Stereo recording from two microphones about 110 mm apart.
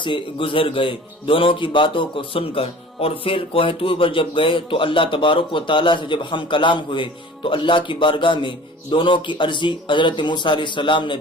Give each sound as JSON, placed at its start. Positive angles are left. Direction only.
{"t": 0.0, "sound": "a man's voice", "side_deg": 50}